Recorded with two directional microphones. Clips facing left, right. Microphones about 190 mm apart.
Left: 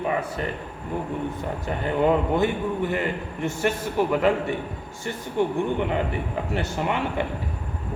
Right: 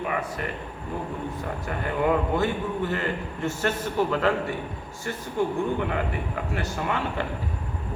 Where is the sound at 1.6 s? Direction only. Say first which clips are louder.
Left 3 dB; 25° left (ahead or behind).